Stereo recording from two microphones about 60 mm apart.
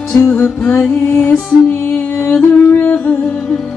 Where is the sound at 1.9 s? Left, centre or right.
Left.